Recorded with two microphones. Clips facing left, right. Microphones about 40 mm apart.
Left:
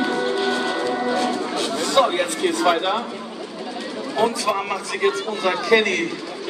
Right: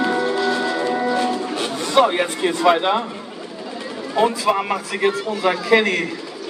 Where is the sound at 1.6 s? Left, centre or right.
Right.